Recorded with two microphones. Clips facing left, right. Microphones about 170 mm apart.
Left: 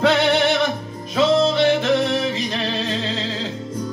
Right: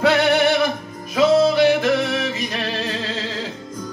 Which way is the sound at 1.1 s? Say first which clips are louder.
Right 2 dB; 10° right (ahead or behind).